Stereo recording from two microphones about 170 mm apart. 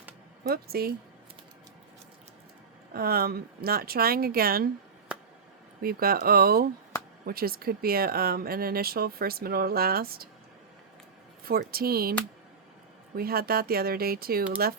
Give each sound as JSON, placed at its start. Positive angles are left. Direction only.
{"t": 0.4, "sound": "speech", "side_deg": -65}
{"t": 2.9, "sound": "speech", "side_deg": -60}
{"t": 5.8, "sound": "speech", "side_deg": -60}
{"t": 11.4, "sound": "speech", "side_deg": -60}
{"t": 13.1, "sound": "speech", "side_deg": -60}